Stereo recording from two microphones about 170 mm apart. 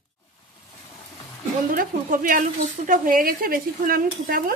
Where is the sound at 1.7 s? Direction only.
55° right (ahead or behind).